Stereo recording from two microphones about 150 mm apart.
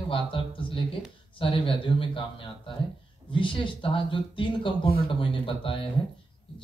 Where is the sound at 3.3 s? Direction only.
35° left (ahead or behind).